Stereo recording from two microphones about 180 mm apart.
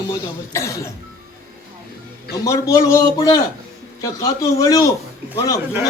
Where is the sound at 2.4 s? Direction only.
15° left (ahead or behind).